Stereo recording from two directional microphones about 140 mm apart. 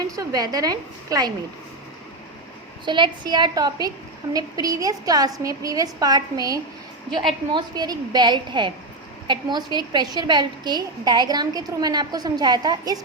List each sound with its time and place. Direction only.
0.2 s a woman's voice: 25° right (ahead or behind)
2.8 s a woman's voice: 35° right (ahead or behind)